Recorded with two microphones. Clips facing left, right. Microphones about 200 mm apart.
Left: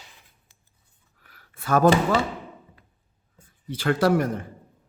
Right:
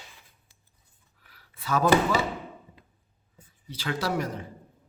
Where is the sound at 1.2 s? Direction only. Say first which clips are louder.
Left 1 dB; 50° left (ahead or behind).